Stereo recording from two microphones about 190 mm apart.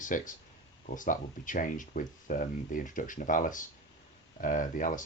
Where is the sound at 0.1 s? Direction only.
45° left (ahead or behind).